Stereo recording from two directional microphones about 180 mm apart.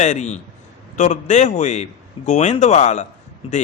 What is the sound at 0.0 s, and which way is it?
A man's voice, 40° left (ahead or behind).